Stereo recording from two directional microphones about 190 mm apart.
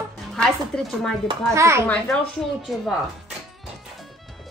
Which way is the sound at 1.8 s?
5° left (ahead or behind).